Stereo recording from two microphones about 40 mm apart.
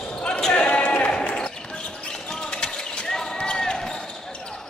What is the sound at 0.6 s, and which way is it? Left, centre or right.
Basketball bounce, left.